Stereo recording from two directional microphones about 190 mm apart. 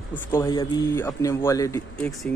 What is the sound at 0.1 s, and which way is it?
Speech, 10° left (ahead or behind).